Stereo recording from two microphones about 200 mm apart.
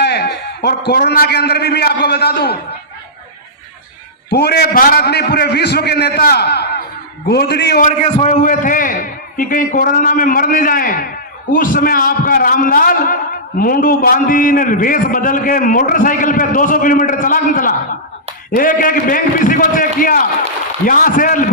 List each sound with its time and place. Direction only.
0.0 s a man's voice: 55° left (ahead or behind)
4.3 s a man's voice: 55° left (ahead or behind)
7.8 s a man's voice: 40° left (ahead or behind)